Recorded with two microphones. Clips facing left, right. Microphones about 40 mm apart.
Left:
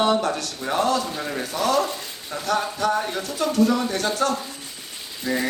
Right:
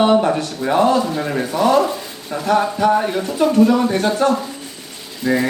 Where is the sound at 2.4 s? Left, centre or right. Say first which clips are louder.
Right 7 dB; right.